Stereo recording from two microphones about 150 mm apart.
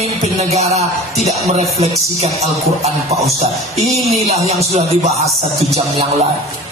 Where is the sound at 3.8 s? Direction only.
45° right (ahead or behind).